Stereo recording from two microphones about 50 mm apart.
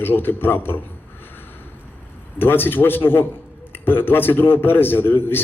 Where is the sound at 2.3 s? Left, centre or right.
Left.